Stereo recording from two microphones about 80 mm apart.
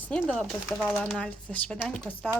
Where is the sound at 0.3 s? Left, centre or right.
Centre.